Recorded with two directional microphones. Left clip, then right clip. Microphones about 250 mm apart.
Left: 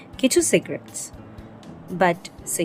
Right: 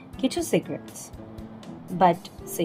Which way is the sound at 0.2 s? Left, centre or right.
Centre.